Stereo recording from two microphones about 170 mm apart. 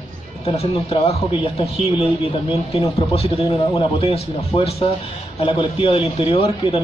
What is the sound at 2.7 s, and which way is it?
A man's voice, 30° left (ahead or behind).